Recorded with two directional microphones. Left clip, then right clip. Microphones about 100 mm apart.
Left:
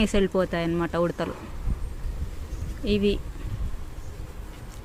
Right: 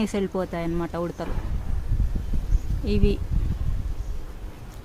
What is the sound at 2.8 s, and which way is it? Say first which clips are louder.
Speech: left 2 dB; centre (ahead or behind).